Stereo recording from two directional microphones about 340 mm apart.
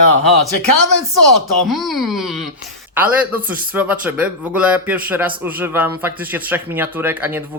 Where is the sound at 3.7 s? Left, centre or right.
Centre.